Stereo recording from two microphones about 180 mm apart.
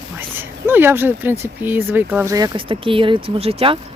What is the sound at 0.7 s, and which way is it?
Speech, 10° right (ahead or behind).